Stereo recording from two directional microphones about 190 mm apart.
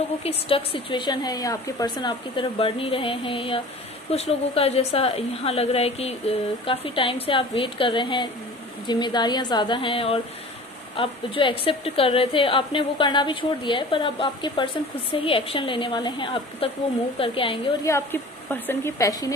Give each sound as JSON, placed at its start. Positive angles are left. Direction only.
{"t": 0.2, "sound": "a woman's voice", "side_deg": 30}
{"t": 17.8, "sound": "a woman's voice", "side_deg": 15}